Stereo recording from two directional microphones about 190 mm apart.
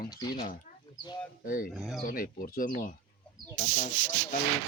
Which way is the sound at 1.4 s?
45° left (ahead or behind).